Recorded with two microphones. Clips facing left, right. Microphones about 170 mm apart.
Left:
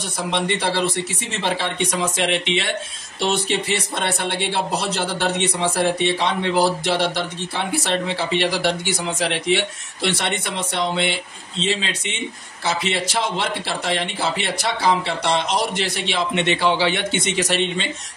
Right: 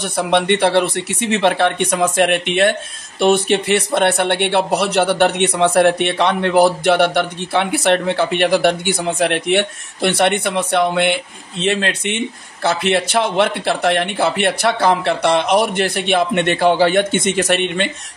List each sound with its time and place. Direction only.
0.0 s speech: 65° right (ahead or behind)